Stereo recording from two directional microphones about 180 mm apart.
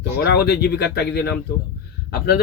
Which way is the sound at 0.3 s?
65° left (ahead or behind).